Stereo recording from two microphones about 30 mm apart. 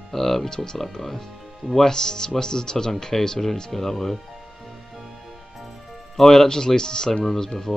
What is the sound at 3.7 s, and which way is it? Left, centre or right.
Speech, centre.